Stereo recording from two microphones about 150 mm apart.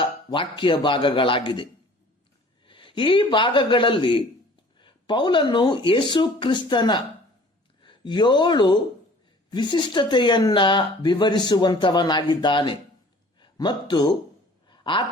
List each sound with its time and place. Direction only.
0.0 s speech: 30° left (ahead or behind)
2.6 s a man's voice: 35° left (ahead or behind)
14.7 s a sound: 35° left (ahead or behind)